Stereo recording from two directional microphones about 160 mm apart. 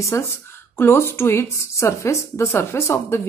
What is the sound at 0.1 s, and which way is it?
Speech, 15° left (ahead or behind).